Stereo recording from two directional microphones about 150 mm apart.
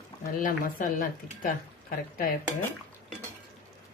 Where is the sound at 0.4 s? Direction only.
65° left (ahead or behind).